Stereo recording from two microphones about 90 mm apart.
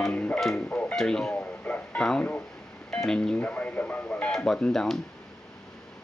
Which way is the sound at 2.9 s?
10° left (ahead or behind).